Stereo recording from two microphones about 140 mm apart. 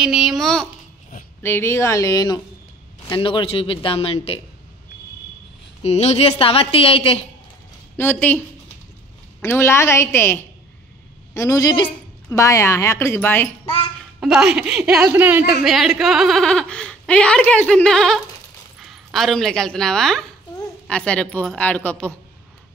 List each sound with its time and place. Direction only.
0.0 s a woman's voice: 5° right (ahead or behind)
1.4 s speech: 15° left (ahead or behind); by 4.4 s 45° left (ahead or behind)
5.8 s a woman's voice: 50° left (ahead or behind)
8.0 s speech: 15° left (ahead or behind)
9.4 s speech: 20° left (ahead or behind)
14.2 s a woman's voice: 5° right (ahead or behind)
15.6 s a woman's voice: centre (ahead or behind)